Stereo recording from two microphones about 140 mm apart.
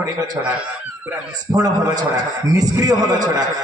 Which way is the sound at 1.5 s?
30° right (ahead or behind).